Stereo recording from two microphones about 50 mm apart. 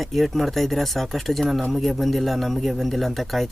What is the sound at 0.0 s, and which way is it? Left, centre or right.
Speech, centre.